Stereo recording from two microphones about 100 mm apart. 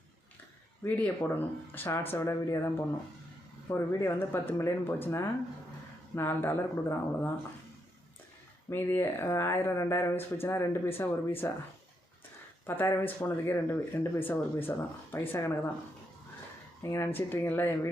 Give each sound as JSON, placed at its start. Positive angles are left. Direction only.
{"t": 0.9, "sound": "speech", "side_deg": 15}
{"t": 8.7, "sound": "speech", "side_deg": 25}
{"t": 12.6, "sound": "speech", "side_deg": 25}
{"t": 16.8, "sound": "speech", "side_deg": 30}